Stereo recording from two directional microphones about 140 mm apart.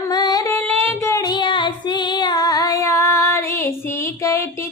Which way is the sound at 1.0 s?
20° left (ahead or behind).